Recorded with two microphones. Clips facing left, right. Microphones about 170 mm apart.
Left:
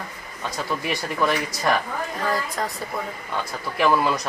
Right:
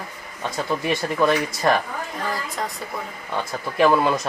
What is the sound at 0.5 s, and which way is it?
Speech, 25° right (ahead or behind).